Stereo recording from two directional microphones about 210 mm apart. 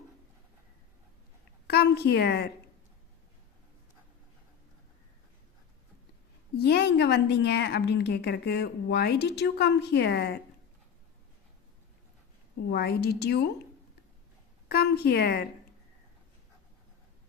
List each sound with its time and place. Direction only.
1.6 s a woman's voice: 50° left (ahead or behind)
6.6 s a woman's voice: 50° left (ahead or behind)
12.7 s a woman's voice: 50° left (ahead or behind)
14.7 s a woman's voice: 50° left (ahead or behind)